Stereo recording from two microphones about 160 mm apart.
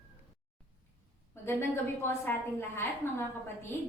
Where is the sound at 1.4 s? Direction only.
15° left (ahead or behind).